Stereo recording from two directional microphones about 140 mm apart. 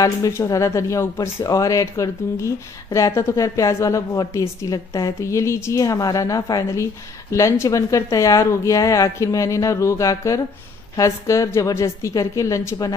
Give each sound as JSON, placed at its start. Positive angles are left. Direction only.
{"t": 0.0, "sound": "speech", "side_deg": 25}